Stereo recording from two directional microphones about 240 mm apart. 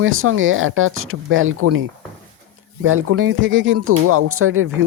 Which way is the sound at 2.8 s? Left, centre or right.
Right.